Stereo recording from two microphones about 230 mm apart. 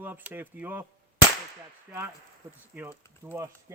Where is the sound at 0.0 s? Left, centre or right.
Centre.